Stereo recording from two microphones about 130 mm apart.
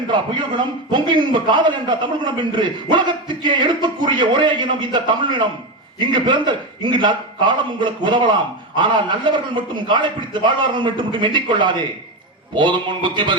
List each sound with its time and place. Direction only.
0.1 s a man's voice: 35° right (ahead or behind)